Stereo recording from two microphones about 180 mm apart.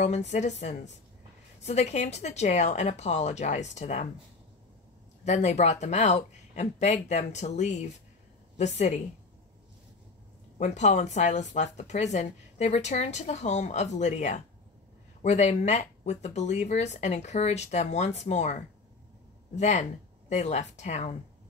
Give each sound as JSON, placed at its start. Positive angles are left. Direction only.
{"t": 0.0, "sound": "speech", "side_deg": 40}
{"t": 5.2, "sound": "speech", "side_deg": 40}
{"t": 10.6, "sound": "speech", "side_deg": 40}